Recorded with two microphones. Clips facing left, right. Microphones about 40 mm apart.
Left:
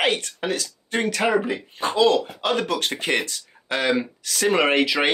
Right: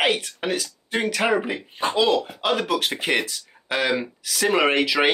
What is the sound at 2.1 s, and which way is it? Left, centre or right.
Speech, centre.